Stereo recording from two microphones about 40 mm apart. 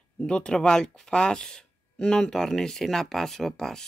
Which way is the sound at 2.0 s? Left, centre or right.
Left.